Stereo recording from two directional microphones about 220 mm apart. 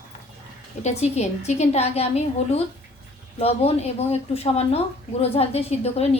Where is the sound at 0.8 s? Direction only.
30° left (ahead or behind).